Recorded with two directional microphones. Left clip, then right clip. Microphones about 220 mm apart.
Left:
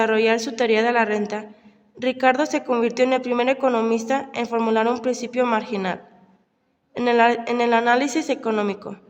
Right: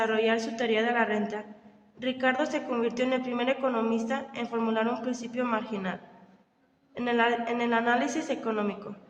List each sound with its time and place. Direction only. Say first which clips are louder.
0.0 s a woman's voice: left 7 dB; 50° left (ahead or behind)